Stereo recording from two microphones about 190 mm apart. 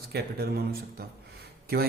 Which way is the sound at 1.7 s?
55° right (ahead or behind).